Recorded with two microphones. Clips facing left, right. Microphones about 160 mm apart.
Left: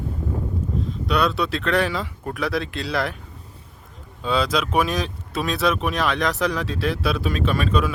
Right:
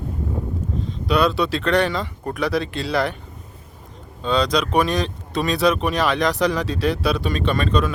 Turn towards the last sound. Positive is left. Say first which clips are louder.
# right 1 dB
turn(degrees=5)  # may be behind; listen again after turning